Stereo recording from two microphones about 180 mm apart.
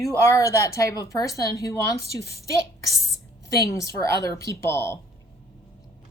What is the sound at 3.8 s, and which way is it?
Speech, 15° left (ahead or behind).